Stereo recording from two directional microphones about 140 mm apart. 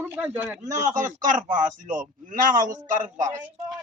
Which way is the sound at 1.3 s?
65° right (ahead or behind).